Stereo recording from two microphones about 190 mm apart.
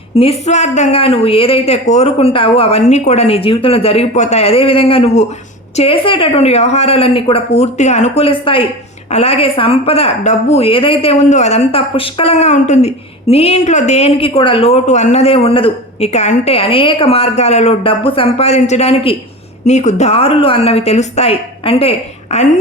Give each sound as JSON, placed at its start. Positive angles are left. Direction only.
{"t": 0.2, "sound": "a woman's voice", "side_deg": 35}